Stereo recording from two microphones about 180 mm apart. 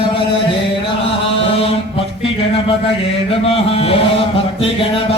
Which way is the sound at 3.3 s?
30° left (ahead or behind).